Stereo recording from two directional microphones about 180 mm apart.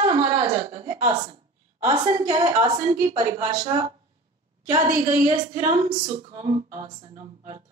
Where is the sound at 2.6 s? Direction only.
20° right (ahead or behind).